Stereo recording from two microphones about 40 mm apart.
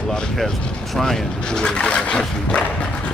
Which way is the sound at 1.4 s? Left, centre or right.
Centre.